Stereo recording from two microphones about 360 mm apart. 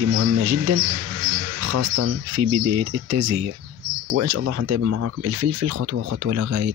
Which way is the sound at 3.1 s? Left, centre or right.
Right.